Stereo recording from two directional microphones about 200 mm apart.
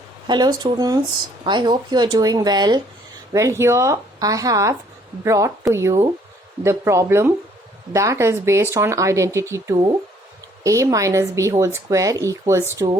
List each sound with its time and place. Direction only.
0.3 s a woman's voice: 20° right (ahead or behind)